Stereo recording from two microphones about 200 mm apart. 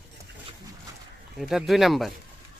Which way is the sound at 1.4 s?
Centre (ahead or behind).